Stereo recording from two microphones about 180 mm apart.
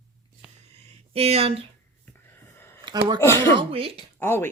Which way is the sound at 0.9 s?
35° right (ahead or behind).